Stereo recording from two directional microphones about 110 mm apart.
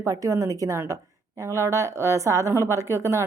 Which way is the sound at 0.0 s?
30° right (ahead or behind).